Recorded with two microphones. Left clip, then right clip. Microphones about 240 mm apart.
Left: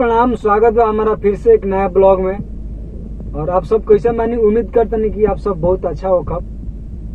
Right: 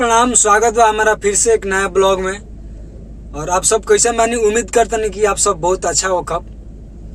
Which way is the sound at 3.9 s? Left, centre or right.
Right.